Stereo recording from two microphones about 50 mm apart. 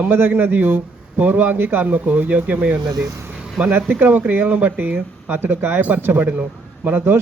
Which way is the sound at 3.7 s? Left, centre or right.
Right.